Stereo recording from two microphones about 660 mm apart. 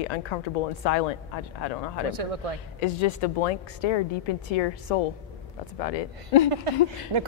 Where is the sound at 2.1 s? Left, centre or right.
Right.